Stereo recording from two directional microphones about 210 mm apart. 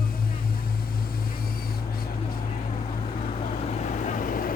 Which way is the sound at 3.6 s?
35° left (ahead or behind).